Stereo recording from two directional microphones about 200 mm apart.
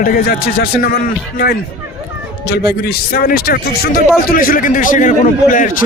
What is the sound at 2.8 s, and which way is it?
A man's voice, 50° left (ahead or behind).